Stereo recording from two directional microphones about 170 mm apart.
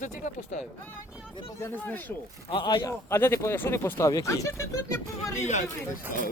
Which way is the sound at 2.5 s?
25° left (ahead or behind).